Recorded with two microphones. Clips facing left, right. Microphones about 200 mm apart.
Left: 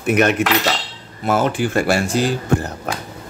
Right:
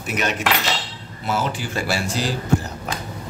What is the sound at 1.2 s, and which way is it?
Speech, 55° left (ahead or behind).